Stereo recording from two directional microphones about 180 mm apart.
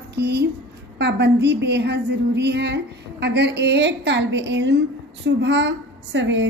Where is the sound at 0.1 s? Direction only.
65° right (ahead or behind).